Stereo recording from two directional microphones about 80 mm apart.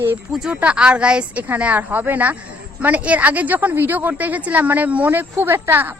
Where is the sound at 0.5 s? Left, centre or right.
Centre.